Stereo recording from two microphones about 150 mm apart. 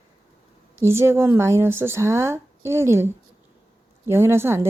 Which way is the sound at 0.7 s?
15° right (ahead or behind).